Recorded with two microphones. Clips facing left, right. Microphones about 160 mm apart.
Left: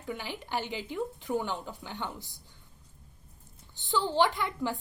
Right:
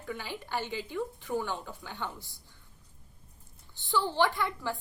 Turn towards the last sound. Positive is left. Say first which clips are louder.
# left 1 dB
turn(degrees=15)  # may be behind; listen again after turning